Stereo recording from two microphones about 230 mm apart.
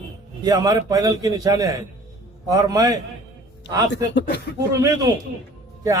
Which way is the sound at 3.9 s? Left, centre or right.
Left.